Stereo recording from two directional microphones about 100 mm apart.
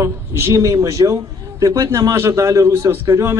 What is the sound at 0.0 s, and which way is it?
A man's voice, 30° right (ahead or behind).